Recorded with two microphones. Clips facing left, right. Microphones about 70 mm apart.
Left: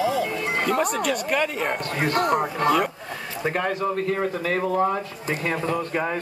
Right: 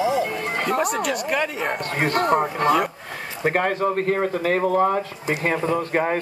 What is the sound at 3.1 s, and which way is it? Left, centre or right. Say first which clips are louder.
Speech: right 3 dB; right.